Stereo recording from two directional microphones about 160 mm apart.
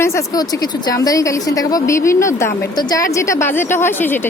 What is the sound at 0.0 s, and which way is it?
Speech, 15° left (ahead or behind).